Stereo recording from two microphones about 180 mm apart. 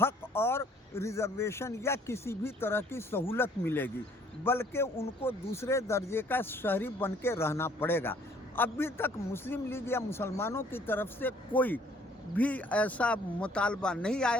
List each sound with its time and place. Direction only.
0.0 s speech: 10° left (ahead or behind)